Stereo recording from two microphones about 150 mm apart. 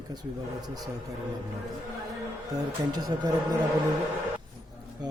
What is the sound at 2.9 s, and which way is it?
Speech, 25° right (ahead or behind).